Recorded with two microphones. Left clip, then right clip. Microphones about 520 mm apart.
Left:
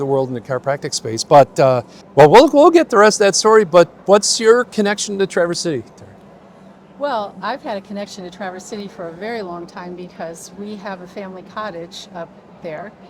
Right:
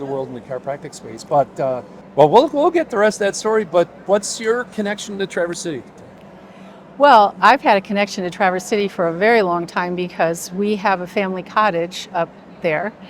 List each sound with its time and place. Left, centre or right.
0.1 s speech: left
7.0 s a woman's voice: right